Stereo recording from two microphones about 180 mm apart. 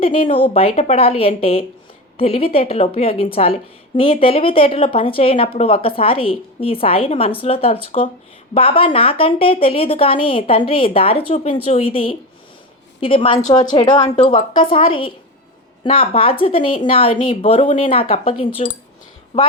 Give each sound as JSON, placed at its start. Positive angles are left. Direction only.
{"t": 0.0, "sound": "a woman's voice", "side_deg": 30}